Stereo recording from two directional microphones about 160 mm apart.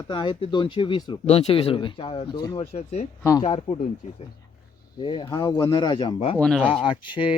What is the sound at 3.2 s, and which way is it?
Speech, 20° left (ahead or behind).